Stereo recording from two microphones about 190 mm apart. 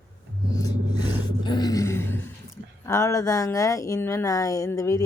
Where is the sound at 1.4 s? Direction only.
20° left (ahead or behind).